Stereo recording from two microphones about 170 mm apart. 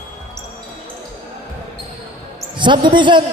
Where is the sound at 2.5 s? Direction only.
30° right (ahead or behind).